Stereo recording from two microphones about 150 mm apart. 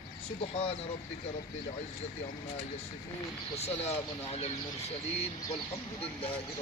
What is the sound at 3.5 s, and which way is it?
Speech, 45° left (ahead or behind).